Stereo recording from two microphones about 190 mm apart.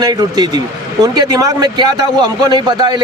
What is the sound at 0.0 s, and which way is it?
A man's voice, 20° right (ahead or behind).